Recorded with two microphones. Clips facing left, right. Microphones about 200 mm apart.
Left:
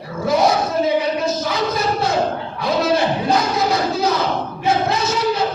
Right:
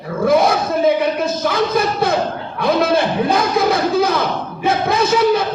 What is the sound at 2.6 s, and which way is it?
Crowd, 55° right (ahead or behind).